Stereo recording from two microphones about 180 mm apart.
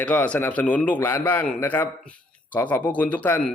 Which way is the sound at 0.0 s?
10° left (ahead or behind).